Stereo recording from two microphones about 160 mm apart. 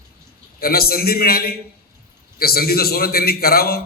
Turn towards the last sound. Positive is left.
turn(degrees=70)  # may be behind; listen again after turning